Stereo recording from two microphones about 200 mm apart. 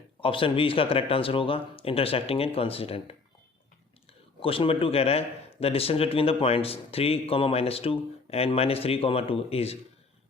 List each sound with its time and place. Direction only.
0.2 s speech: 25° left (ahead or behind)
4.4 s speech: 25° left (ahead or behind)